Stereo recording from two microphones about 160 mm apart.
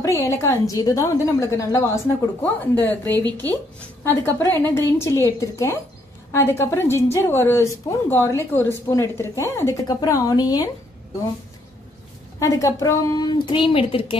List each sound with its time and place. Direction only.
0.0 s a woman's voice: 20° left (ahead or behind)
12.4 s a woman's voice: 20° left (ahead or behind)